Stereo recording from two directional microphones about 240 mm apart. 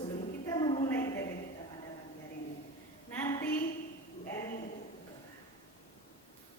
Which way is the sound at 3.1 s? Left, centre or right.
Centre.